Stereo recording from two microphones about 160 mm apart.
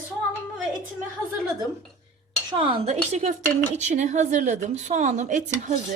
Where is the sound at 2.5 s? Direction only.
30° right (ahead or behind).